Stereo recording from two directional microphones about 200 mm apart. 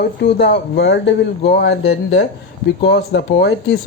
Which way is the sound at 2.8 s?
55° left (ahead or behind).